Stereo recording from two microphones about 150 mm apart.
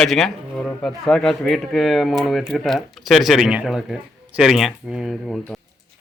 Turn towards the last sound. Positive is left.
turn(degrees=0)  # may be behind; listen again after turning